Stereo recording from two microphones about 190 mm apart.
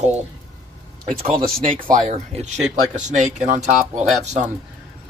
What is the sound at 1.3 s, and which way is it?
Speech, 50° right (ahead or behind).